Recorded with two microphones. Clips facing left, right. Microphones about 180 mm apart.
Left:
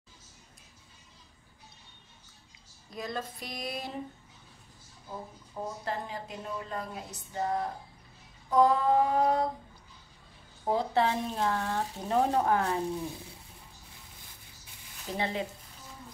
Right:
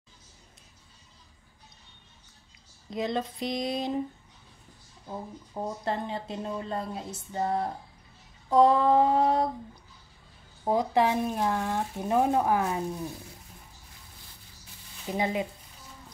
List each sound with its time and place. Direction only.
2.9 s speech: 25° right (ahead or behind)
5.0 s speech: 25° right (ahead or behind)
10.6 s speech: 15° right (ahead or behind)
15.1 s speech: 15° right (ahead or behind)